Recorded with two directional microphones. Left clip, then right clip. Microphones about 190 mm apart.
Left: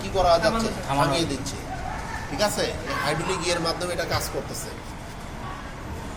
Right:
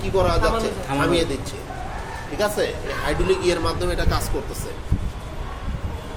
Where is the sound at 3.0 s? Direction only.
45° right (ahead or behind).